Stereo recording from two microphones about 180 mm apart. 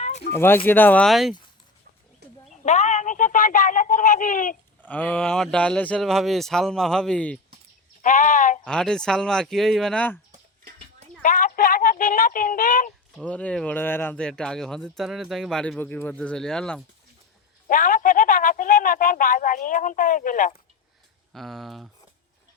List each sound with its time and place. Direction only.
0.3 s speech: 10° left (ahead or behind)
2.6 s speech: 40° left (ahead or behind)
4.8 s speech: 10° left (ahead or behind)
8.0 s speech: 45° left (ahead or behind)
8.6 s speech: 5° left (ahead or behind)
11.2 s speech: 45° left (ahead or behind)
13.1 s speech: 5° left (ahead or behind)
17.7 s speech: 50° left (ahead or behind)
21.3 s speech: centre (ahead or behind)